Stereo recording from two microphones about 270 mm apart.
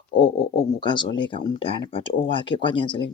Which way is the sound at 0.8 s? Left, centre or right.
Centre.